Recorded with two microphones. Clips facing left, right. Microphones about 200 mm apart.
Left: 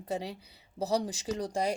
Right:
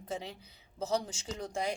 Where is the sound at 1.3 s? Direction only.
35° left (ahead or behind).